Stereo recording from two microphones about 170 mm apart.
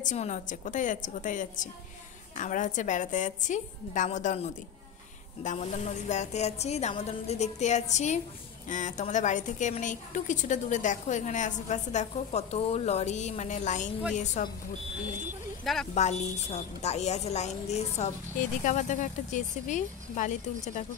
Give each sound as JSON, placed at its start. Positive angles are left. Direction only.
{"t": 0.0, "sound": "a woman's voice", "side_deg": 45}
{"t": 15.6, "sound": "speech", "side_deg": 0}
{"t": 15.9, "sound": "a woman's voice", "side_deg": 40}